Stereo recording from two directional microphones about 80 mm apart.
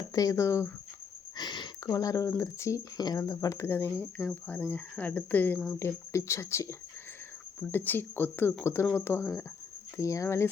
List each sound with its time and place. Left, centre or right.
0.1 s speech: left
1.4 s a sound: left
1.9 s speech: left
3.0 s speech: left
4.4 s cricket: left
5.8 s speech: left
7.7 s cricket: left
8.6 s speech: left